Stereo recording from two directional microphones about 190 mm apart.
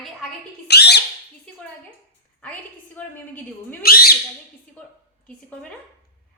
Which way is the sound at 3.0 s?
10° left (ahead or behind).